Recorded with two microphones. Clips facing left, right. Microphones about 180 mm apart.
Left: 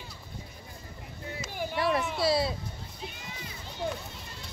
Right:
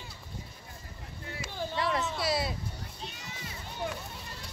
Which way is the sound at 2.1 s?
25° left (ahead or behind).